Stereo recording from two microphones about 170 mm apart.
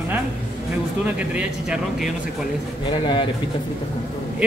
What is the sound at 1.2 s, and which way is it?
Speech, 5° right (ahead or behind).